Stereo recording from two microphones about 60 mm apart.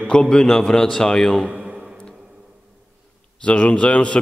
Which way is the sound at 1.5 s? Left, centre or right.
Centre.